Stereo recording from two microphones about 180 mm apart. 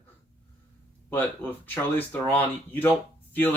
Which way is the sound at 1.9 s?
10° left (ahead or behind).